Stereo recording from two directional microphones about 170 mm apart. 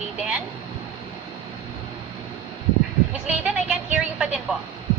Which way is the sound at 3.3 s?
5° right (ahead or behind).